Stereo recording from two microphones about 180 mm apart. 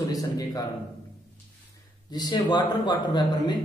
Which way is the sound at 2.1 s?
25° left (ahead or behind).